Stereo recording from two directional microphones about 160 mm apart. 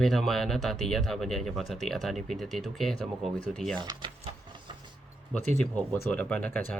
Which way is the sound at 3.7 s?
30° right (ahead or behind).